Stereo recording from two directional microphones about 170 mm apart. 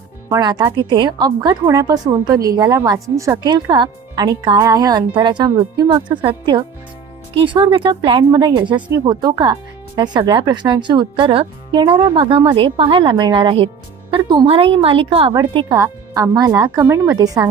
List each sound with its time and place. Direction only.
0.3 s a woman's voice: 25° right (ahead or behind)
16.8 s a woman's voice: 10° right (ahead or behind)
17.2 s a woman's voice: 20° right (ahead or behind)